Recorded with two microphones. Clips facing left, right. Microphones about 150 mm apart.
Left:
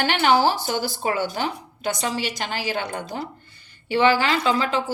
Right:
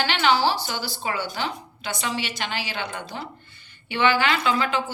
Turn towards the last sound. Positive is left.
turn(degrees=35)  # may be behind; listen again after turning